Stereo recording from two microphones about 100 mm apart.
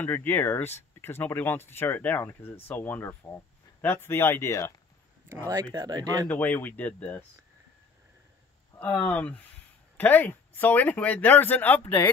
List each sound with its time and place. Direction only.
0.0 s speech: 20° left (ahead or behind)
5.3 s speech: 30° right (ahead or behind)
6.2 s speech: 15° left (ahead or behind)
8.7 s speech: 15° left (ahead or behind)